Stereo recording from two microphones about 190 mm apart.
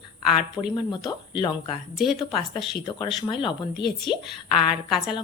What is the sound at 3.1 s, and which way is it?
Speech, 25° left (ahead or behind).